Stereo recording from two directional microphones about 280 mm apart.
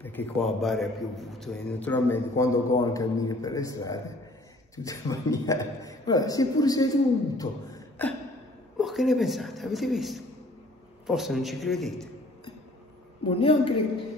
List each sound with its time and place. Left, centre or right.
0.0 s a man's voice: centre
7.3 s beatboxing: centre
8.7 s a man's voice: centre
13.3 s a woman's voice: centre